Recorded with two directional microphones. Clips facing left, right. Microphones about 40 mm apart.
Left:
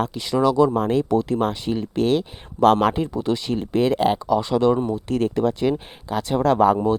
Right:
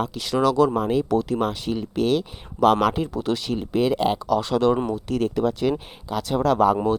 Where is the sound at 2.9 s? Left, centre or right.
Centre.